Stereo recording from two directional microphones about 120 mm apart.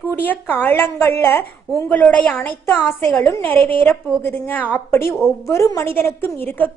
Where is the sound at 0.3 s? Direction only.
15° left (ahead or behind).